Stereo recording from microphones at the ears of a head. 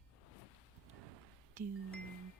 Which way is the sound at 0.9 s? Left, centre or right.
Right.